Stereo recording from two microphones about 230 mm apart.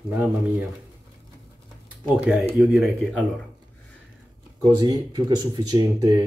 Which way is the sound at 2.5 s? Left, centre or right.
Centre.